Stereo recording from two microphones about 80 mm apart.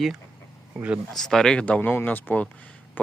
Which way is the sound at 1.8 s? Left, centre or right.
Left.